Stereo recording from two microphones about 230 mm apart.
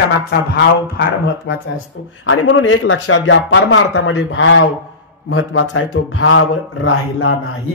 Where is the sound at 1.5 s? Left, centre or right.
Left.